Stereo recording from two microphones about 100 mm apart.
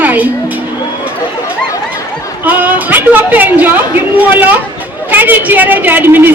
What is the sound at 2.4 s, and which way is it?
A woman's voice, 15° right (ahead or behind).